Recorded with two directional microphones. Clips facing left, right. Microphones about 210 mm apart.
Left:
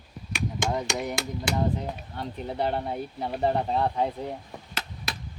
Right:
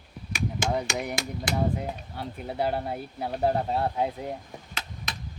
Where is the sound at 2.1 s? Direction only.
5° right (ahead or behind).